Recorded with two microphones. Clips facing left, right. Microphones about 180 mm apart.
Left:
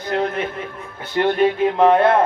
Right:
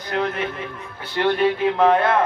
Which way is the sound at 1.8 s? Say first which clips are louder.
Left 3 dB; 25° left (ahead or behind).